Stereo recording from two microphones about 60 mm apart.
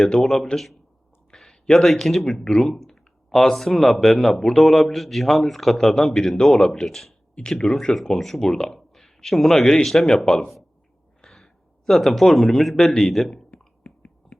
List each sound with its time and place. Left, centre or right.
0.1 s speech: centre
11.3 s a sound: centre
12.7 s speech: centre
13.0 s speech: centre
13.5 s whispering: left